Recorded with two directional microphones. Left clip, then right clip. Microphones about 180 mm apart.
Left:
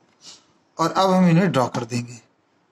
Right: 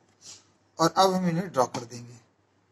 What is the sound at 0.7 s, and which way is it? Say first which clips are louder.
Speech: left 3 dB; 40° left (ahead or behind).